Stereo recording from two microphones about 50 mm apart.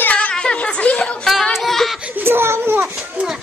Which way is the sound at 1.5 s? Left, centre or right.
Centre.